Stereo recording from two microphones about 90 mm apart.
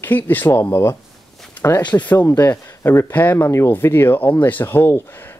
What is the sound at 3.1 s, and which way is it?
Speech, 20° left (ahead or behind).